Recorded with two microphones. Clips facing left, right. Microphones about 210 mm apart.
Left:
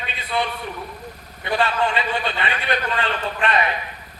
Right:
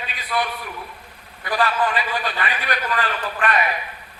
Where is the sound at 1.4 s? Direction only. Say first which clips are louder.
Even; 25° left (ahead or behind).